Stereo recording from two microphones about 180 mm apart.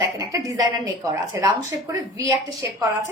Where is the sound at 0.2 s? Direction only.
20° right (ahead or behind).